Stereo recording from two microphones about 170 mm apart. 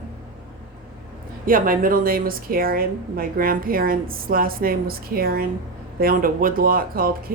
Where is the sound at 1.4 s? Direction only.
55° right (ahead or behind).